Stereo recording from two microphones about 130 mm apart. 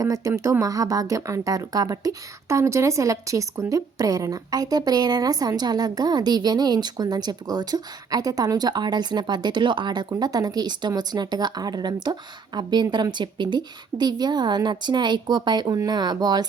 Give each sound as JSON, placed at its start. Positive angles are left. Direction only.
{"t": 0.0, "sound": "speech", "side_deg": -25}